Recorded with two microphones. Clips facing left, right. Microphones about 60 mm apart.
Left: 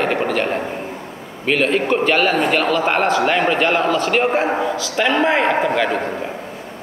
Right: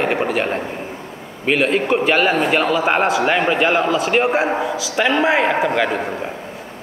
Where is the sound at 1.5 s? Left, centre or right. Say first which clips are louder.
Even; centre.